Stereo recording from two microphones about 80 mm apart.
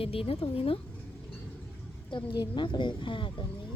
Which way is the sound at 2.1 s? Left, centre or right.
Left.